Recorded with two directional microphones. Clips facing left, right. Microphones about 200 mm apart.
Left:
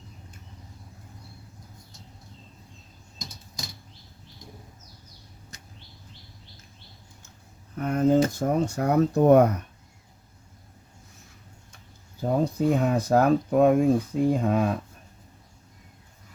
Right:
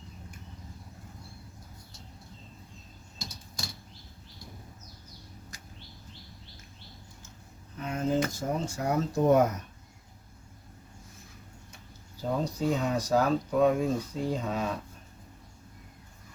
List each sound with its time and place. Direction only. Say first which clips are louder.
7.8 s a sound: left 8 dB; 55° left (ahead or behind)
8.3 s speech: left 7 dB; 60° left (ahead or behind)
12.2 s speech: left 6 dB; 55° left (ahead or behind)